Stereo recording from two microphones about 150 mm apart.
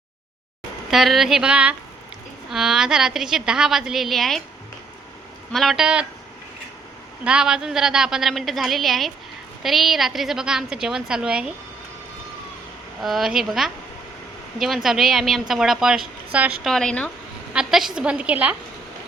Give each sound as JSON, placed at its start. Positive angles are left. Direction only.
{"t": 0.9, "sound": "a woman's voice", "side_deg": 0}
{"t": 5.5, "sound": "a woman's voice", "side_deg": 0}
{"t": 7.3, "sound": "a woman's voice", "side_deg": -5}
{"t": 13.0, "sound": "a woman's voice", "side_deg": 0}
{"t": 16.6, "sound": "a woman's voice", "side_deg": 5}
{"t": 17.5, "sound": "a woman's voice", "side_deg": -5}